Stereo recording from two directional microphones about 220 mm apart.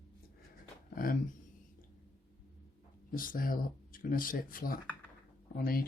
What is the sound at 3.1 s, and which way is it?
Speech, 40° left (ahead or behind).